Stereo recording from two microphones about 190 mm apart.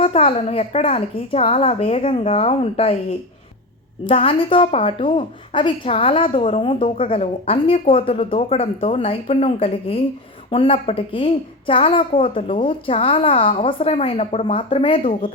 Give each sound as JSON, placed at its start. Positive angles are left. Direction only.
{"t": 0.0, "sound": "a woman's voice", "side_deg": 30}
{"t": 4.0, "sound": "a woman's voice", "side_deg": 30}